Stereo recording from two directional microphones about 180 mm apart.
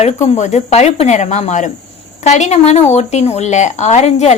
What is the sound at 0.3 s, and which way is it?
Speech, 40° left (ahead or behind).